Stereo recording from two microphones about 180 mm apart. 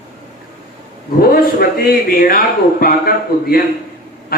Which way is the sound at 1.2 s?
55° left (ahead or behind).